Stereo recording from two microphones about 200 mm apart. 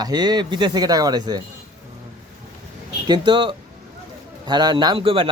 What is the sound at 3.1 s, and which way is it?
Speech, 20° right (ahead or behind).